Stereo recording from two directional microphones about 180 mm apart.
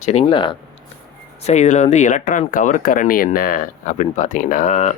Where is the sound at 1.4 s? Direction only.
40° left (ahead or behind).